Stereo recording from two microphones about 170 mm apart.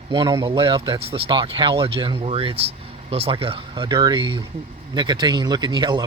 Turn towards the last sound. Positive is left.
turn(degrees=-25)  # may be behind; listen again after turning